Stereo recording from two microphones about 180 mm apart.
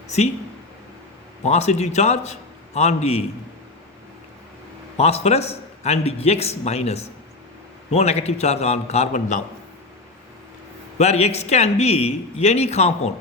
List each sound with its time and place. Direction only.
1.5 s a man's voice: 35° left (ahead or behind)
4.9 s a man's voice: 35° left (ahead or behind)
10.9 s a man's voice: 35° left (ahead or behind)